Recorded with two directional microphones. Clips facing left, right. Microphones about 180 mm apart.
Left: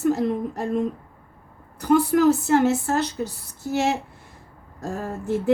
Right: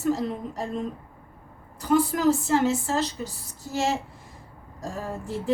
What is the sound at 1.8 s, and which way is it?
A woman's voice, 65° left (ahead or behind).